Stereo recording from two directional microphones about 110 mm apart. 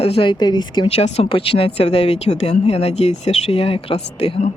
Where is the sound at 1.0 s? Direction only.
70° left (ahead or behind).